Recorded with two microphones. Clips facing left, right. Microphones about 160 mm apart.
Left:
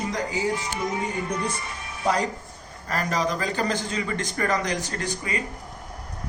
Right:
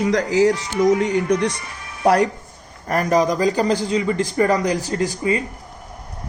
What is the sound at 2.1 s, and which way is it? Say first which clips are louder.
Speech: right 8 dB; 65° right (ahead or behind).